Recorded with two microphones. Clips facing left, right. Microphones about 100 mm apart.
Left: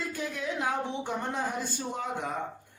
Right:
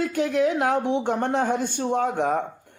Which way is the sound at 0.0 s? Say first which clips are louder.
Right 12 dB; 70° right (ahead or behind).